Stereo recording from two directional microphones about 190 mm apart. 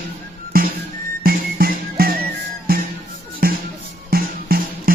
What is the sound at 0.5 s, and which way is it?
Music, 50° right (ahead or behind).